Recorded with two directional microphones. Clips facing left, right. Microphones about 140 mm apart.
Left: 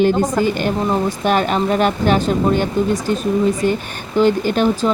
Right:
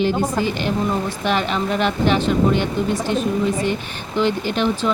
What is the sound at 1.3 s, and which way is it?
Speech, 45° left (ahead or behind).